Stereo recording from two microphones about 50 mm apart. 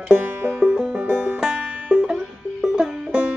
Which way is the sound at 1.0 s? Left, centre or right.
Right.